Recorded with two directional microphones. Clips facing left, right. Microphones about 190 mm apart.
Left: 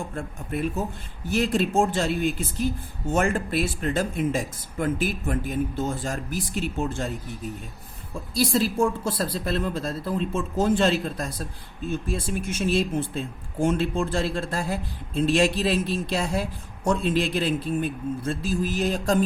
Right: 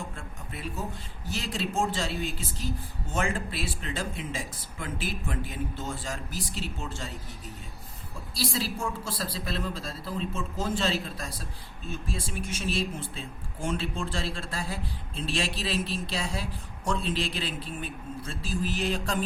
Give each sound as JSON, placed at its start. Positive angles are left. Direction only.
{"t": 0.2, "sound": "speech", "side_deg": 55}
{"t": 8.4, "sound": "speech", "side_deg": 50}
{"t": 12.5, "sound": "speech", "side_deg": 50}